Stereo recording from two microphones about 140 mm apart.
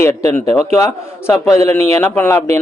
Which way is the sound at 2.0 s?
15° left (ahead or behind).